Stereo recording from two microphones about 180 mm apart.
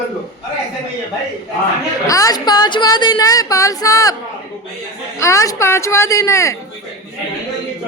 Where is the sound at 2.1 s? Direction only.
20° left (ahead or behind).